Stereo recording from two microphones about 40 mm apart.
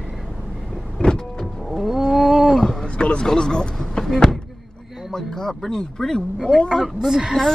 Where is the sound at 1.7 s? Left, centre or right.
Centre.